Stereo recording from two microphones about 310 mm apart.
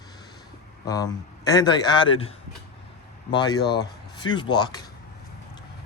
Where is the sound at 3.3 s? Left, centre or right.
Centre.